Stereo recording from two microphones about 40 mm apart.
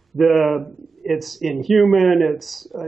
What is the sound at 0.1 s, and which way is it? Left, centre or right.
Speech, centre.